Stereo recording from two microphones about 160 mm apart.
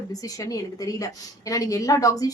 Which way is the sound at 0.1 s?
20° left (ahead or behind).